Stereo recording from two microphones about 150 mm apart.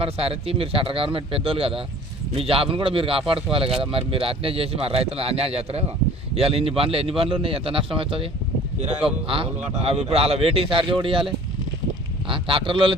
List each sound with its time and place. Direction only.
0.0 s a man's voice: 40° right (ahead or behind)
12.3 s a man's voice: 35° right (ahead or behind)